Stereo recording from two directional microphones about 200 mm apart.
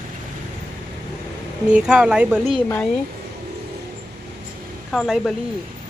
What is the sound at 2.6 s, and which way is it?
Speech, 10° left (ahead or behind).